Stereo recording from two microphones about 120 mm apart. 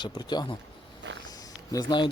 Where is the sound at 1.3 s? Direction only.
30° left (ahead or behind).